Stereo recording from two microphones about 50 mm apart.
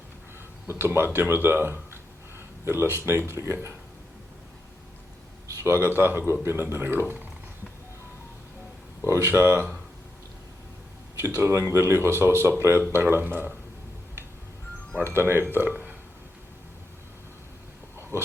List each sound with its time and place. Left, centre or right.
0.7 s speech: right
5.7 s speech: right
9.0 s speech: right
9.3 s speech: right
11.2 s speech: right
15.0 s speech: right